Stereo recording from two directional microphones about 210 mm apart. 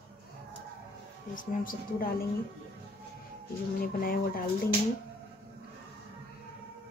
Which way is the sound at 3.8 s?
45° left (ahead or behind).